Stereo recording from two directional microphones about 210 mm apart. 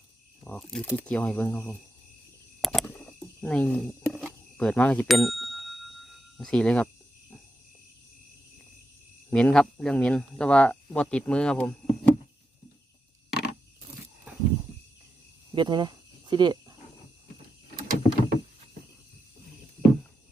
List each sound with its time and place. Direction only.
0.4 s speech: 5° left (ahead or behind)
2.6 s a sound: centre (ahead or behind)
9.3 s speech: 5° left (ahead or behind)
15.5 s cricket: 20° right (ahead or behind)
17.7 s rowboat: 45° right (ahead or behind)